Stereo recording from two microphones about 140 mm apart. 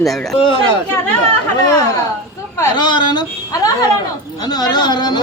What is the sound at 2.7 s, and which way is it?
A woman's voice, 30° left (ahead or behind).